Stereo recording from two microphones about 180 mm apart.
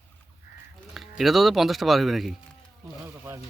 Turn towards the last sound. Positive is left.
turn(degrees=-15)  # may be behind; listen again after turning